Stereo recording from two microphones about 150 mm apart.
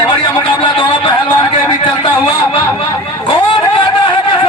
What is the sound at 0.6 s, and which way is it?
Speech, 35° left (ahead or behind).